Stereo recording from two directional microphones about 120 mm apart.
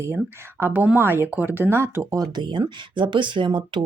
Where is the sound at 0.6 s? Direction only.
15° right (ahead or behind).